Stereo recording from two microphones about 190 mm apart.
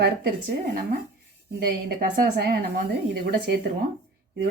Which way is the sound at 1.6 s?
50° right (ahead or behind).